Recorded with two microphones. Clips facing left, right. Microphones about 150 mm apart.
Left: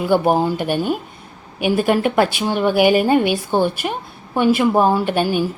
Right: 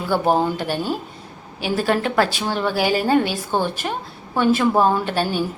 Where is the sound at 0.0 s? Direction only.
15° left (ahead or behind).